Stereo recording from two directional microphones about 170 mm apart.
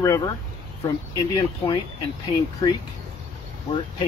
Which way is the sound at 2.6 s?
20° left (ahead or behind).